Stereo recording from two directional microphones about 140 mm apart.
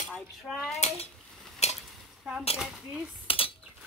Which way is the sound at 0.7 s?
45° left (ahead or behind).